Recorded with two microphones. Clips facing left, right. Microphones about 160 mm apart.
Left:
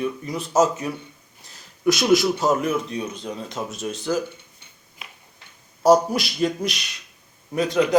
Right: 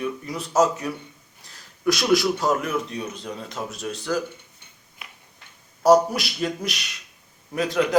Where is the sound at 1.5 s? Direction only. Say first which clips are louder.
Left 3 dB; 20° left (ahead or behind).